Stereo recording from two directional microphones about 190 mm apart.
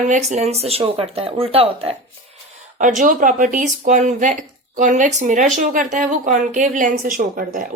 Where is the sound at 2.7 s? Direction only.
40° right (ahead or behind).